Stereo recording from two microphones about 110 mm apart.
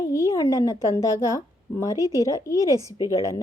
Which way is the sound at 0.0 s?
30° left (ahead or behind).